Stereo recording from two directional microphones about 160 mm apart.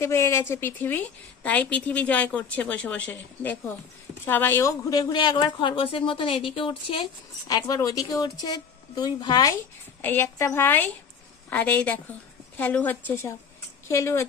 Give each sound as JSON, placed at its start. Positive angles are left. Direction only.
{"t": 0.0, "sound": "a woman's voice", "side_deg": 20}